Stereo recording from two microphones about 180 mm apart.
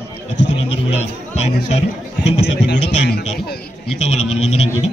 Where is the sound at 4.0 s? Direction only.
40° left (ahead or behind).